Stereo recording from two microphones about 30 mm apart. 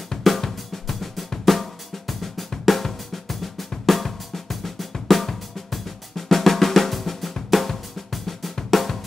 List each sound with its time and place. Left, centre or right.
0.2 s drum: centre
8.6 s music: centre